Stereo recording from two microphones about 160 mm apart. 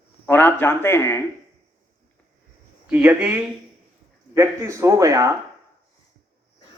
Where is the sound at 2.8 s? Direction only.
10° right (ahead or behind).